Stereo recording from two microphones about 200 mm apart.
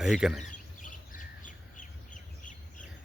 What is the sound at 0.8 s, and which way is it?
Bird, 40° left (ahead or behind).